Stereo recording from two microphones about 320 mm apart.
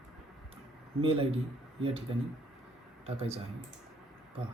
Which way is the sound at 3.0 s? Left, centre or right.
Centre.